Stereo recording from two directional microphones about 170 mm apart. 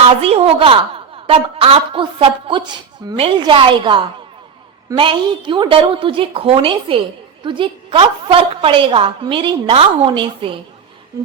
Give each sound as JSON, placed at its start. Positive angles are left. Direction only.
{"t": 0.0, "sound": "a woman's voice", "side_deg": -35}